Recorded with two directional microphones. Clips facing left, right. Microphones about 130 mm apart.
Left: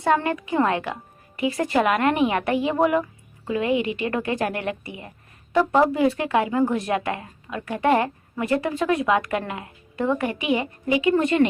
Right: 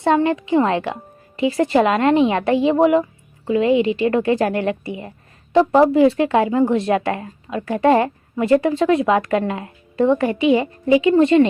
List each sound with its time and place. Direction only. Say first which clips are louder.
0.0 s a woman's voice: right 5 dB; 25° right (ahead or behind)